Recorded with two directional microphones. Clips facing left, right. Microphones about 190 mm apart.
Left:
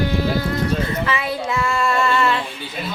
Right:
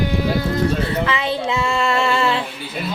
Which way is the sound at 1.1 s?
25° right (ahead or behind).